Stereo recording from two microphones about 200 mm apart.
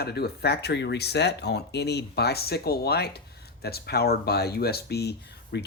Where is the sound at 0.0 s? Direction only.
50° left (ahead or behind).